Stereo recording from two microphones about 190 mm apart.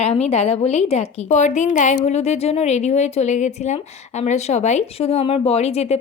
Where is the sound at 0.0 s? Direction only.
35° left (ahead or behind).